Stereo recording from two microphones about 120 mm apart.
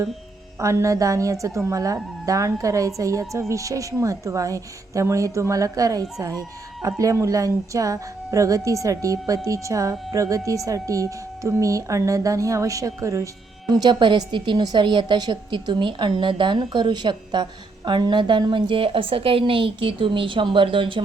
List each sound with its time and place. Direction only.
0.6 s a woman's voice: 25° right (ahead or behind); by 21.0 s 45° right (ahead or behind)